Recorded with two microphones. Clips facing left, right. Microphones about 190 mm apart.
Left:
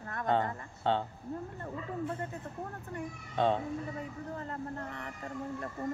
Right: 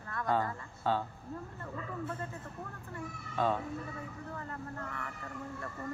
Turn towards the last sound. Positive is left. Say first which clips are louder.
# left 1 dB
turn(degrees=20)  # may be behind; listen again after turning